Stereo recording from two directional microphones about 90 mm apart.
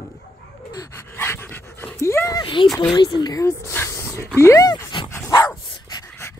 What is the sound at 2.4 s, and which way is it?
Speech, 65° left (ahead or behind).